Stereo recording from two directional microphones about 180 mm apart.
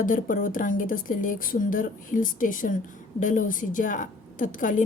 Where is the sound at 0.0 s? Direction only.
50° left (ahead or behind).